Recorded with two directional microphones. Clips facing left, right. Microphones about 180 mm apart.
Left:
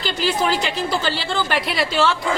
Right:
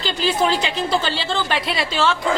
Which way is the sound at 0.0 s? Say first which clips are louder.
Right 1 dB; 20° right (ahead or behind).